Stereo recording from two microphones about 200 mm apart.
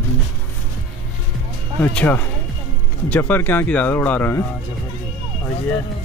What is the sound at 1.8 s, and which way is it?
Speech, 10° left (ahead or behind).